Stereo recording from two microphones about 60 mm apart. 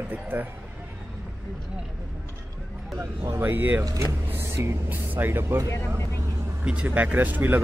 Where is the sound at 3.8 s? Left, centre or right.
Right.